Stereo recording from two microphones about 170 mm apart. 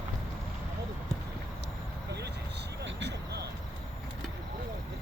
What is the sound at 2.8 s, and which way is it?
Vehicle, 90° right.